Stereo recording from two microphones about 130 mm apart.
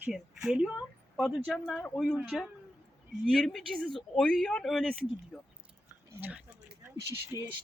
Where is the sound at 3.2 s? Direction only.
5° left (ahead or behind).